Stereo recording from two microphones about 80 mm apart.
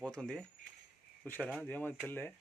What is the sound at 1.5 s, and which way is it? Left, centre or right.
Speech, left.